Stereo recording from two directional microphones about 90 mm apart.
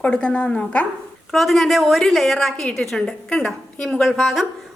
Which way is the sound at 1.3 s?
Centre (ahead or behind).